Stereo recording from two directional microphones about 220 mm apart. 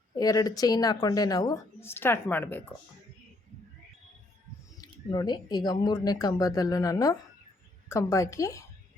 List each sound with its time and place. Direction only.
0.2 s speech: 15° left (ahead or behind)
4.8 s speech: 20° left (ahead or behind)